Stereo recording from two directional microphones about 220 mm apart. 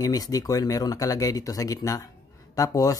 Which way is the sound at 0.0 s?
15° left (ahead or behind).